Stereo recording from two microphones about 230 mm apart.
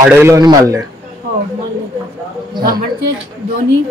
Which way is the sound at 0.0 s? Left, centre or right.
Centre.